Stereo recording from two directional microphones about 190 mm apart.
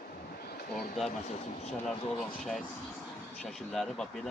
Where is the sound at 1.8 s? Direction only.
Centre (ahead or behind).